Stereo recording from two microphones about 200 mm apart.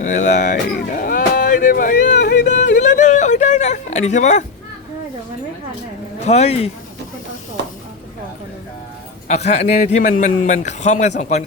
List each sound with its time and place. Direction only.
0.0 s a sound: 40° left (ahead or behind)
2.5 s yodeling: 40° left (ahead or behind)
6.2 s a man's voice: 35° left (ahead or behind)
9.2 s a man's voice: 35° left (ahead or behind)